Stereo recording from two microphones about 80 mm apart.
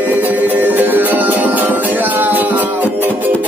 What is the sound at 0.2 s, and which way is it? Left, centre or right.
Music, right.